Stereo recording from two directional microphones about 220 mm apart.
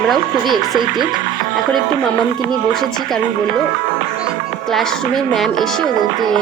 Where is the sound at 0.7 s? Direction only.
20° right (ahead or behind).